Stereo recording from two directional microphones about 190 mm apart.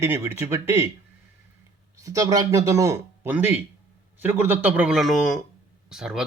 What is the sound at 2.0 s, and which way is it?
A man's voice, 15° right (ahead or behind).